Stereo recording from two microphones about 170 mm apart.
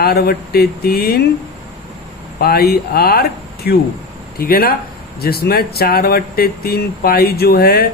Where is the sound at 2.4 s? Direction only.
65° left (ahead or behind).